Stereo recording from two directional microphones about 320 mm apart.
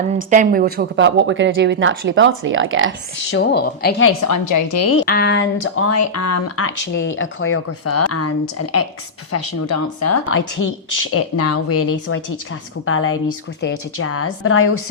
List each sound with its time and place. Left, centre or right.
0.3 s speech: right
3.3 s speech: left
4.2 s a woman's voice: left
5.0 s speech: left